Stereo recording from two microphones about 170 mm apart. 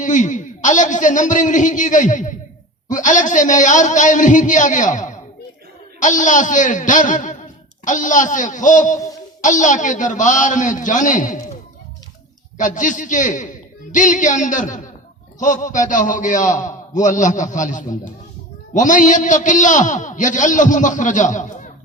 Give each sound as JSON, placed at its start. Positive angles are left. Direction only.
{"t": 0.0, "sound": "a man's voice", "side_deg": 45}
{"t": 12.5, "sound": "a man's voice", "side_deg": 50}